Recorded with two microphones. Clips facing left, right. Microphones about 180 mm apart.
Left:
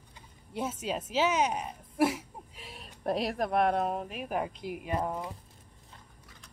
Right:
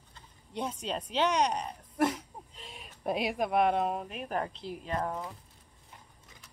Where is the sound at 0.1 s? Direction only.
5° left (ahead or behind).